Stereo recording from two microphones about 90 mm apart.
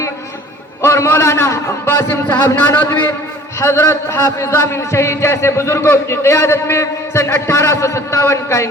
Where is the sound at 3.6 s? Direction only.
30° left (ahead or behind).